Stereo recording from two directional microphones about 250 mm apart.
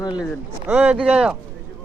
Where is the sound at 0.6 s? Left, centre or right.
Centre.